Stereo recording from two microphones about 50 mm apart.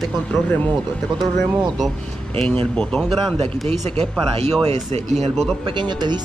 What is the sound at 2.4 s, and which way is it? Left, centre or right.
Speech, centre.